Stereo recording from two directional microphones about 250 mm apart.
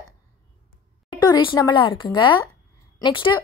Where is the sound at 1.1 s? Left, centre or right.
Centre.